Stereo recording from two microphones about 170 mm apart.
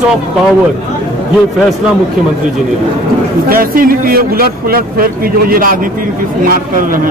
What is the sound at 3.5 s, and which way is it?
A man's voice, 55° right (ahead or behind).